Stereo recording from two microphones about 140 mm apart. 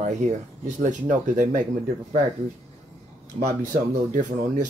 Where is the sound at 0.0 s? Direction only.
60° right (ahead or behind).